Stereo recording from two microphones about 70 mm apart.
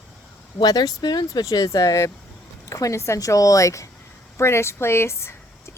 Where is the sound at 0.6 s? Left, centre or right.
Left.